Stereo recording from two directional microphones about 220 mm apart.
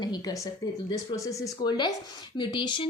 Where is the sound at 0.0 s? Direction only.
20° left (ahead or behind).